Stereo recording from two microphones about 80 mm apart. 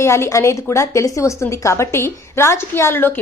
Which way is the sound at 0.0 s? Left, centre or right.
Left.